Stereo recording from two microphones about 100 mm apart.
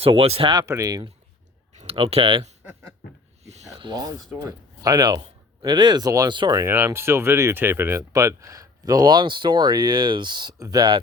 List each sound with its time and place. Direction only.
0.0 s speech: 70° right (ahead or behind)
0.6 s speech: 30° right (ahead or behind)
1.9 s speech: 80° right
3.8 s speech: 50° right (ahead or behind)
6.6 s speech: 25° right (ahead or behind); by 11.0 s 50° right (ahead or behind)